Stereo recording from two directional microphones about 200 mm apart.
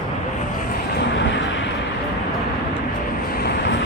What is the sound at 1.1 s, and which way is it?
Vehicle, 65° left (ahead or behind).